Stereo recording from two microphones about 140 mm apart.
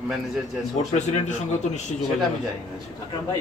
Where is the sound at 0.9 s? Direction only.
55° left (ahead or behind).